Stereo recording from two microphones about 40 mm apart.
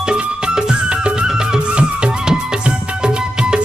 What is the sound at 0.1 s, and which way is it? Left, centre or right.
Music, right.